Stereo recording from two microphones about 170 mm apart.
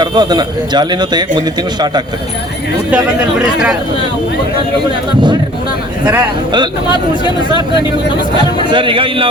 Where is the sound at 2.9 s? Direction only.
5° right (ahead or behind).